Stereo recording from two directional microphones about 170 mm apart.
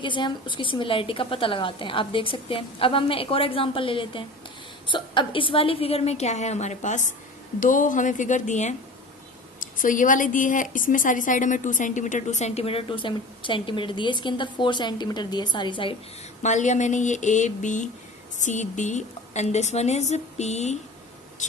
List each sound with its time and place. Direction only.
0.0 s speech: 25° left (ahead or behind)
16.4 s speech: 45° left (ahead or behind)